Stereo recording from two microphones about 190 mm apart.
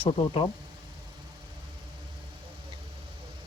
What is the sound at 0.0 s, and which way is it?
Speech, 30° left (ahead or behind).